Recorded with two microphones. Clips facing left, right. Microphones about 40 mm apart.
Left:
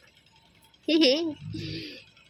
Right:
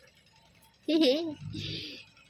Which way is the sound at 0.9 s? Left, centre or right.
Left.